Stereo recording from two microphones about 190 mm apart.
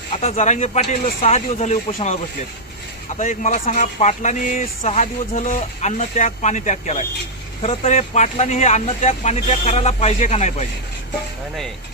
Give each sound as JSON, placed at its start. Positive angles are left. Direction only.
{"t": 0.1, "sound": "speech", "side_deg": 35}
{"t": 3.2, "sound": "speech", "side_deg": 40}